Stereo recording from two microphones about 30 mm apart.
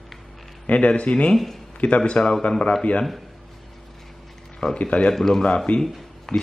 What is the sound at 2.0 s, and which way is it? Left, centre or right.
Speech, left.